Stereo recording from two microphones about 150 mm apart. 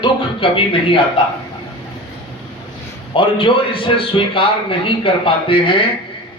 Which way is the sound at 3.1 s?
35° left (ahead or behind).